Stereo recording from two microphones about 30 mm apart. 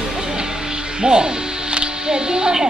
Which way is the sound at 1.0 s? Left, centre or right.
Right.